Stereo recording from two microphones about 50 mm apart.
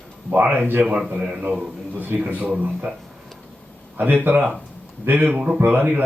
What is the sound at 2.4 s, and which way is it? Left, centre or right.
Speech, right.